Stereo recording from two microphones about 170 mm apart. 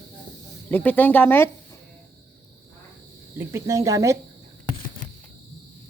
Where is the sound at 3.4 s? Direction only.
15° right (ahead or behind).